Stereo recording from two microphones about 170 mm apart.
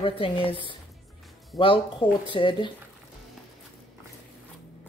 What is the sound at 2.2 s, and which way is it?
Speech, 30° left (ahead or behind).